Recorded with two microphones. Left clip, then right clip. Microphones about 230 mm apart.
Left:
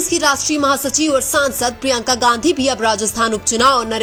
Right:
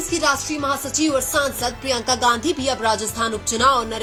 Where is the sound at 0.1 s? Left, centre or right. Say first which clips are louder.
Left 4 dB; left.